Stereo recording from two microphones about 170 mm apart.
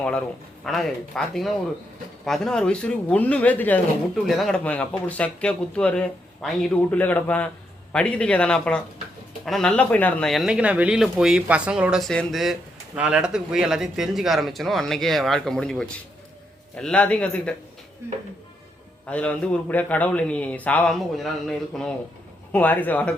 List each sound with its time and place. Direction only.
0.6 s speech: centre (ahead or behind)
19.0 s speech: 5° left (ahead or behind)